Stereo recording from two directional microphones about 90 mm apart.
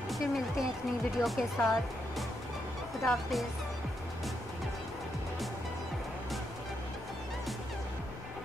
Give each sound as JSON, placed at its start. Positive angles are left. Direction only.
{"t": 0.1, "sound": "speech", "side_deg": 0}
{"t": 3.0, "sound": "speech", "side_deg": 0}